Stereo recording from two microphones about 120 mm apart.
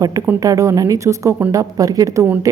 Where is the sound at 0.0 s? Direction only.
25° right (ahead or behind).